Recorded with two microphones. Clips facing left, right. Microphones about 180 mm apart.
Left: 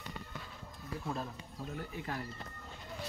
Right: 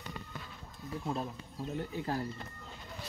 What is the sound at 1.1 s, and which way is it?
Speech, 20° right (ahead or behind).